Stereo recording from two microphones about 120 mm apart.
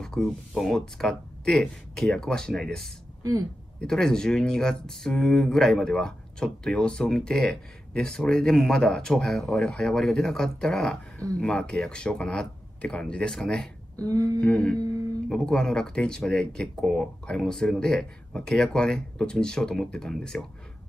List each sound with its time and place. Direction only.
0.0 s speech: 5° left (ahead or behind)
14.0 s a sound: 30° right (ahead or behind)
14.4 s speech: 10° left (ahead or behind)